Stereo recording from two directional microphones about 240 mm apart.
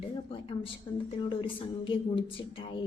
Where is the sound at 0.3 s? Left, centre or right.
Left.